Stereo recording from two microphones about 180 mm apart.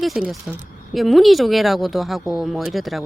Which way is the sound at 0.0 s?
Centre (ahead or behind).